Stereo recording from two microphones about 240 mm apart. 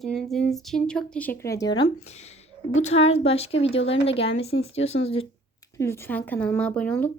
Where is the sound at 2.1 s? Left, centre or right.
Left.